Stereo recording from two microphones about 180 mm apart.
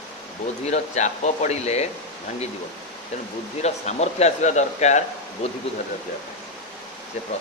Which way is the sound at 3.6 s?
40° left (ahead or behind).